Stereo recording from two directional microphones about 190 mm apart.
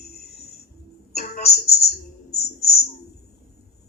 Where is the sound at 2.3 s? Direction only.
55° left (ahead or behind).